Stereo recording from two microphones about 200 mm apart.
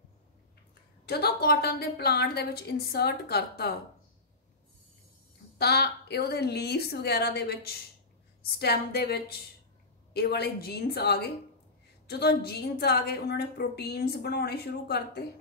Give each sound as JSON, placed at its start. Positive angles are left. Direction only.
{"t": 1.0, "sound": "a woman's voice", "side_deg": 50}
{"t": 5.6, "sound": "a woman's voice", "side_deg": 55}